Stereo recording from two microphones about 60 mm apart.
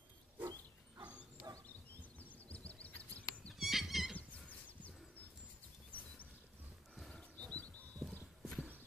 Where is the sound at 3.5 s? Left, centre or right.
Centre.